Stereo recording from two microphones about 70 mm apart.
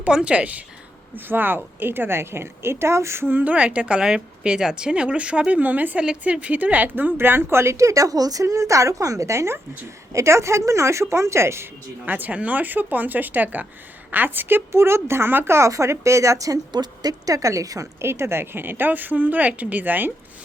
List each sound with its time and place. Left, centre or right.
0.0 s a woman's voice: centre
1.1 s a woman's voice: right
12.0 s a woman's voice: right
16.7 s speech: right
18.0 s a woman's voice: right